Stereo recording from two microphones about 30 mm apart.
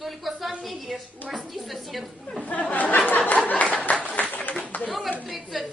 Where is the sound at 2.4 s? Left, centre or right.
Left.